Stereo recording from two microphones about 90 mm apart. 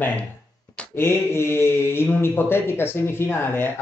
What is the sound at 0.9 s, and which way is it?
Speech, 30° left (ahead or behind).